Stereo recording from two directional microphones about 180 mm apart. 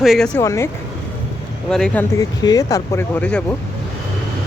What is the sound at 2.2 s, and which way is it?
Speech, 20° left (ahead or behind).